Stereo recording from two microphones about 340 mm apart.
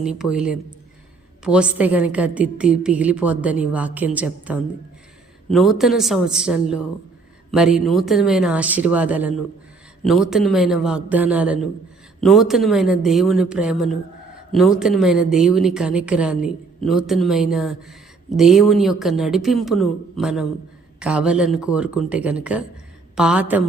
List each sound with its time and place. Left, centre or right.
0.0 s a woman's voice: centre